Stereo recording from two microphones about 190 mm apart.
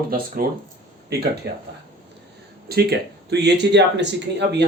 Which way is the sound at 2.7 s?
55° right (ahead or behind).